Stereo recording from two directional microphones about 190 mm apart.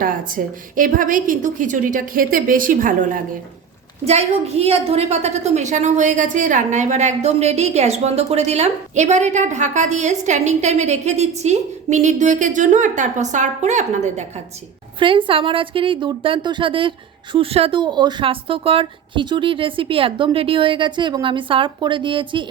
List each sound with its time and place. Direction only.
0.0 s a woman's voice: 45° right (ahead or behind)
4.0 s a woman's voice: 35° right (ahead or behind)
14.9 s speech: 25° right (ahead or behind)